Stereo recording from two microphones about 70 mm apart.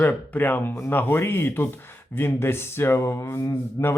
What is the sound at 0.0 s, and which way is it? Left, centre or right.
Speech, left.